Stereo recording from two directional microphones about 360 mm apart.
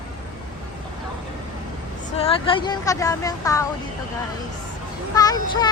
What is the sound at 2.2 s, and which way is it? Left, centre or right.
A woman's voice, centre.